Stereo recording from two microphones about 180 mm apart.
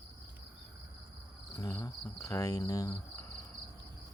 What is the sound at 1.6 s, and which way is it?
Speech, 20° left (ahead or behind).